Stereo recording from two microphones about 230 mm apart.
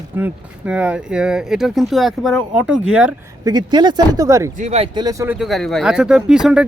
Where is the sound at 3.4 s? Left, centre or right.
Centre.